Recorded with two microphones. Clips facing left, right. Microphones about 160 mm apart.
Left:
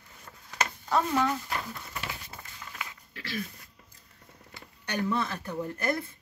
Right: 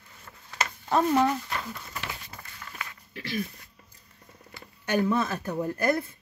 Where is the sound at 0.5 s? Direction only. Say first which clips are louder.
Right 2 dB; 25° right (ahead or behind).